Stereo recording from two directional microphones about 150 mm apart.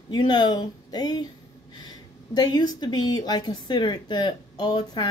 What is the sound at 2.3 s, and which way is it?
Speech, 25° left (ahead or behind).